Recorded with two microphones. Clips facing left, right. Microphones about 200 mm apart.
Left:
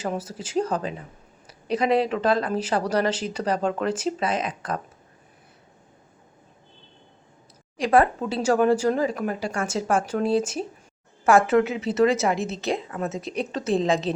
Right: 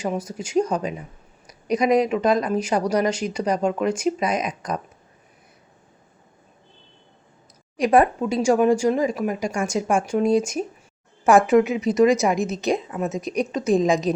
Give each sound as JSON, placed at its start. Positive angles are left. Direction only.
{"t": 0.2, "sound": "speech", "side_deg": -15}
{"t": 7.8, "sound": "speech", "side_deg": -15}